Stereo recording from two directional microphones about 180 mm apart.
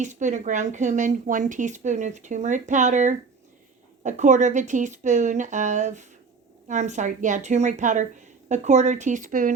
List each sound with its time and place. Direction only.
0.0 s a woman's voice: 40° right (ahead or behind)